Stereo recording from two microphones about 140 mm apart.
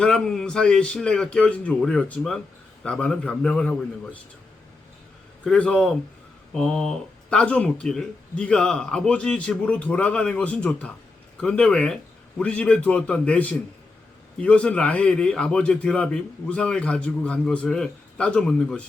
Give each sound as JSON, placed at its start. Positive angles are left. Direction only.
{"t": 0.0, "sound": "speech", "side_deg": 5}
{"t": 5.5, "sound": "speech", "side_deg": 5}